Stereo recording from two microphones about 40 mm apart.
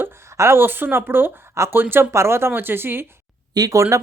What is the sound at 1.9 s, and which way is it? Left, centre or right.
Speech, right.